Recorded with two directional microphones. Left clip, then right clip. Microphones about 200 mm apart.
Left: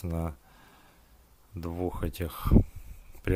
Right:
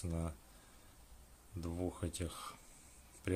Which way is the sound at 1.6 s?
35° left (ahead or behind).